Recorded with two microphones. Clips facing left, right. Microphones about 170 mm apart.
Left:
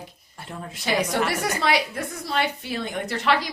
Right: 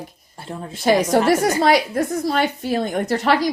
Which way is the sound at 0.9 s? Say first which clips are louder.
Right 8 dB; 40° right (ahead or behind).